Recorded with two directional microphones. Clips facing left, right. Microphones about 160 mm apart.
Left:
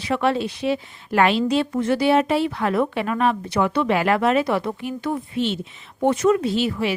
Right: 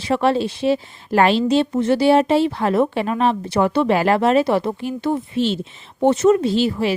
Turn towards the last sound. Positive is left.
turn(degrees=-35)  # may be behind; listen again after turning